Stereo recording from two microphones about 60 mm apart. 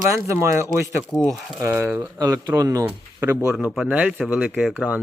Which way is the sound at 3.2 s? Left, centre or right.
Right.